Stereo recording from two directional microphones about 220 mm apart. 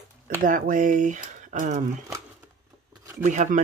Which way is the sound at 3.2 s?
35° right (ahead or behind).